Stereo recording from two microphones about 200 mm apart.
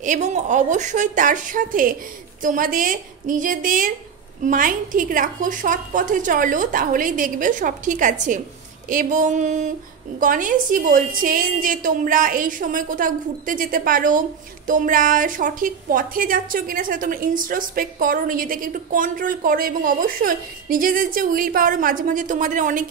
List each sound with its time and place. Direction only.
0.0 s a woman's voice: 40° right (ahead or behind)